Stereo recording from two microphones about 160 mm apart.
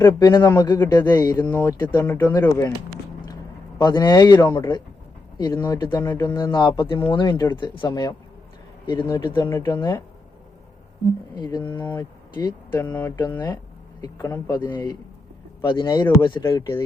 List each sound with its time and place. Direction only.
0.0 s speech: 25° left (ahead or behind)
3.8 s speech: 25° left (ahead or behind)
11.3 s speech: 25° left (ahead or behind)
12.7 s speech: 15° left (ahead or behind)
16.4 s speech: 20° left (ahead or behind)